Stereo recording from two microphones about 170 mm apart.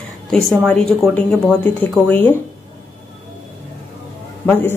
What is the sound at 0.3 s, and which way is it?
A woman's voice, 5° left (ahead or behind).